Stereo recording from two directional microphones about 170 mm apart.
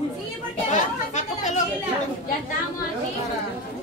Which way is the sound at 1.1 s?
45° left (ahead or behind).